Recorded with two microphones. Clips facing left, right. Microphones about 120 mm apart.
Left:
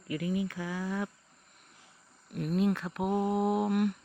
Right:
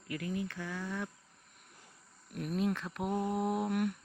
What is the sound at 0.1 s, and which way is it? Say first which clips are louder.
Speech: left 5 dB; 15° left (ahead or behind).